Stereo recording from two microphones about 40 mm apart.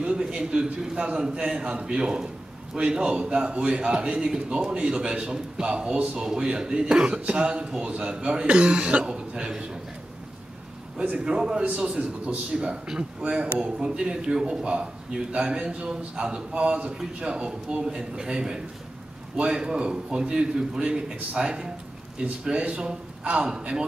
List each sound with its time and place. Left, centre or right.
0.0 s a man's voice: right
11.2 s a man's voice: centre